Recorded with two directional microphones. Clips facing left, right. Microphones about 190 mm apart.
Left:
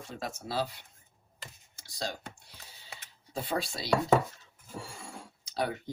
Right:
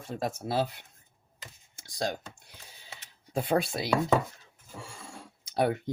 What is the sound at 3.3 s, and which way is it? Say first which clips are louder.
Speech: right 6 dB; 55° right (ahead or behind).